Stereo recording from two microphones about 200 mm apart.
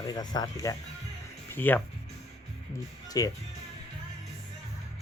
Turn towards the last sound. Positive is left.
turn(degrees=15)  # may be behind; listen again after turning